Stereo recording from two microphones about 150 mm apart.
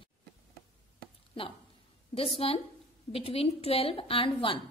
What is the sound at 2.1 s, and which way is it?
A woman's voice, 40° left (ahead or behind).